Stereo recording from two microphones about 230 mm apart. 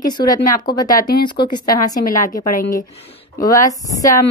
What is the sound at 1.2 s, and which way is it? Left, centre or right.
Speech, centre.